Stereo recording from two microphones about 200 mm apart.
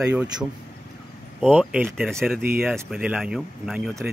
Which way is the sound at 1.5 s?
5° right (ahead or behind).